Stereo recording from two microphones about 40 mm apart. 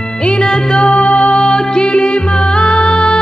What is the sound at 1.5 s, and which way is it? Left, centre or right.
Music, centre.